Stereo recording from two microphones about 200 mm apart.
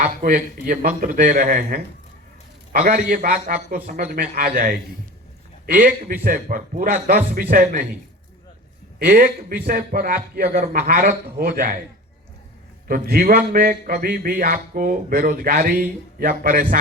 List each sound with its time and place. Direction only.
0.0 s speech: 40° right (ahead or behind)
9.0 s speech: 45° right (ahead or behind)
12.9 s speech: 45° right (ahead or behind)